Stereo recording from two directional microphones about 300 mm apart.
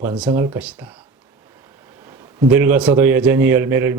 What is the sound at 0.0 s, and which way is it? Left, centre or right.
Speech, centre.